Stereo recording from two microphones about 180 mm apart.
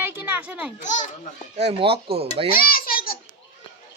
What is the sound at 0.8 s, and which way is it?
Speech, 40° left (ahead or behind).